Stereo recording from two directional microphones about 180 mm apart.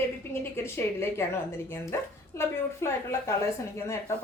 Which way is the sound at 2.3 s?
15° left (ahead or behind).